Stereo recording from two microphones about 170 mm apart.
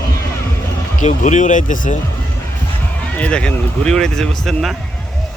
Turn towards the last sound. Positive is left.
turn(degrees=0)  # may be behind; listen again after turning